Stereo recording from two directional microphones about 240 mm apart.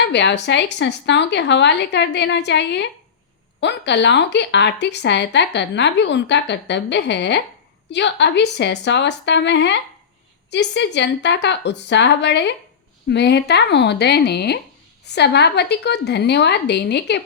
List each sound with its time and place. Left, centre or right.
0.0 s speech: left